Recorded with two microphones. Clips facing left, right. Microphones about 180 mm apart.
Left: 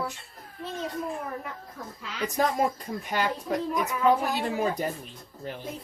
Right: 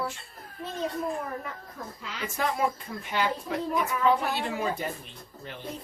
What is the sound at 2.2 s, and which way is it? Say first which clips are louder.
Speech: left 3 dB; 40° left (ahead or behind).